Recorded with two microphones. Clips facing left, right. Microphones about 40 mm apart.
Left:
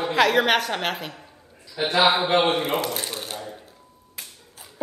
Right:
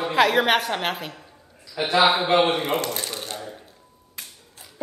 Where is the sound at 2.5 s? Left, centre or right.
Centre.